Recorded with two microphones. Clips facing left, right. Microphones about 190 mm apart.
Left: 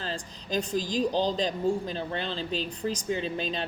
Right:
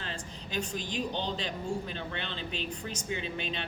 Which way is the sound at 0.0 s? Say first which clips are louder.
Left 5 dB; 35° left (ahead or behind).